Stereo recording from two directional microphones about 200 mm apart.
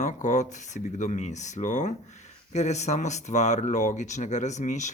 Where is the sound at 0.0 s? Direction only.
40° left (ahead or behind).